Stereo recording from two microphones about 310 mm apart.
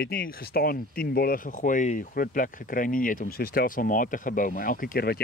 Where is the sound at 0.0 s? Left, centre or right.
Left.